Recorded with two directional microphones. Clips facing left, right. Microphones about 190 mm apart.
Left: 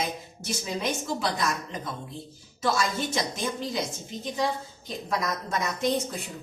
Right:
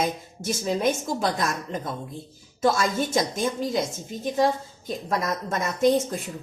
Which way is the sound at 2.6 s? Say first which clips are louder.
Right 4 dB; 50° right (ahead or behind).